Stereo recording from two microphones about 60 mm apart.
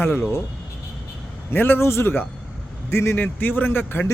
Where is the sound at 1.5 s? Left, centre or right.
Left.